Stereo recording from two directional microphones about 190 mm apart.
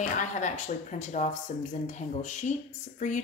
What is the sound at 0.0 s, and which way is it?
A woman's voice, 40° left (ahead or behind).